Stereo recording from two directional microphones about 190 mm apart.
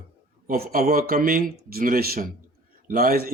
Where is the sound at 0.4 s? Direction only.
50° right (ahead or behind).